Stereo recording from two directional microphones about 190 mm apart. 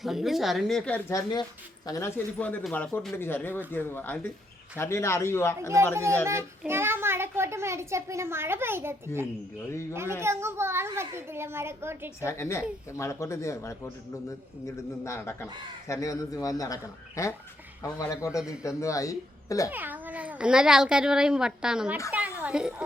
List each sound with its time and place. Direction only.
0.0 s a man's voice: centre (ahead or behind)
5.9 s a child's voice: 15° right (ahead or behind)
12.2 s a man's voice: 15° left (ahead or behind)
15.0 s a man's voice: 15° left (ahead or behind)
19.7 s speech: 10° right (ahead or behind)
22.1 s a sound: 5° right (ahead or behind)